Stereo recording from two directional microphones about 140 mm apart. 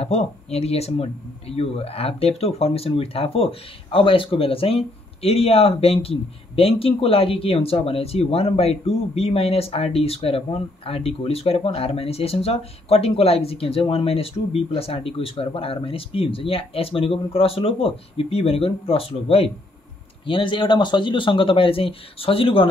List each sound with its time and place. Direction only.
0.0 s speech: 50° left (ahead or behind)